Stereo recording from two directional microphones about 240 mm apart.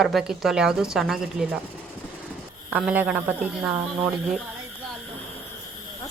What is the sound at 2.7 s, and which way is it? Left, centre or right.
Speech, centre.